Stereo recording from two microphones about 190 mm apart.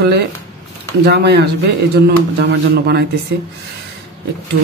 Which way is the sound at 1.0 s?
60° right (ahead or behind).